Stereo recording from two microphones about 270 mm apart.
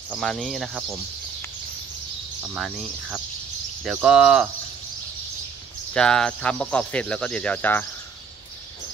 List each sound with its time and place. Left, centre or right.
0.1 s speech: centre
2.5 s speech: centre
5.9 s speech: centre